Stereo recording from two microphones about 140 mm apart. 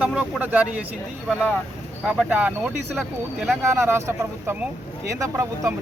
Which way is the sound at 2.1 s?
10° right (ahead or behind).